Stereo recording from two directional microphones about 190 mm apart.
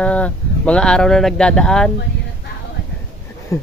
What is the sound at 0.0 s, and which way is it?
Speech, 5° left (ahead or behind).